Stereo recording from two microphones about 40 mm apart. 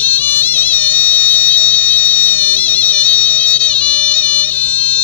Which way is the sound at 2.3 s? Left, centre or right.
Left.